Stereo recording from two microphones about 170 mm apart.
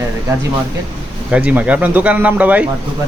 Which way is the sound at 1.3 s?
5° right (ahead or behind).